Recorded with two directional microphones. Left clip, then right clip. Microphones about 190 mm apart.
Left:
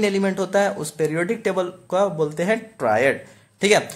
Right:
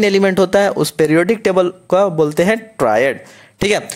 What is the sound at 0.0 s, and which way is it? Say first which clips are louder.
Speech: right 9 dB; 40° right (ahead or behind).